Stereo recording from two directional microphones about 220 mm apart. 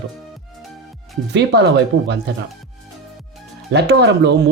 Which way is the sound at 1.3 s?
50° right (ahead or behind).